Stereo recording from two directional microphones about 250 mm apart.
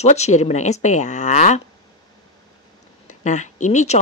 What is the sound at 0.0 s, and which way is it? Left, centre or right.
Speech, left.